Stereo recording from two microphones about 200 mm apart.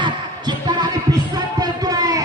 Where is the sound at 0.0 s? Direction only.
20° right (ahead or behind).